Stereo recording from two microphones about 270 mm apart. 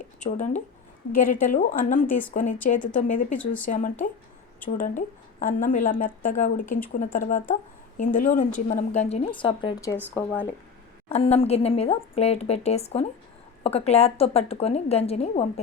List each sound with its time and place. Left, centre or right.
0.0 s a woman's voice: left
3.3 s speech: centre
3.7 s a woman's voice: left
11.1 s a woman's voice: left